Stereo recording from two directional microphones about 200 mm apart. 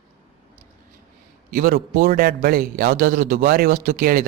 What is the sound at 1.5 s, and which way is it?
Speech, 45° right (ahead or behind).